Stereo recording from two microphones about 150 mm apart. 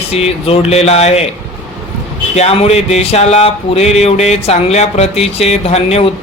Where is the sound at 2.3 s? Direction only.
45° left (ahead or behind).